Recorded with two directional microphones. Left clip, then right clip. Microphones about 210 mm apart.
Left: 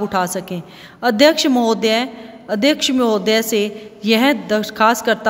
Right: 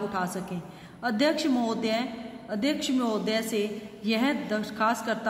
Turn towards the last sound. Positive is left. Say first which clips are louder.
# left 12 dB
turn(degrees=50)  # may be behind; listen again after turning